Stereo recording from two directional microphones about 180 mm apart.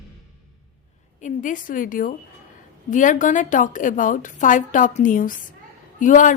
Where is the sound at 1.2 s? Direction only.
45° left (ahead or behind).